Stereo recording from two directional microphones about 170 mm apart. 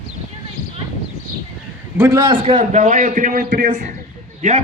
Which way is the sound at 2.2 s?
30° right (ahead or behind).